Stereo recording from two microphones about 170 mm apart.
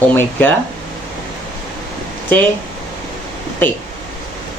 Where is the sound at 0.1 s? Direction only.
10° left (ahead or behind).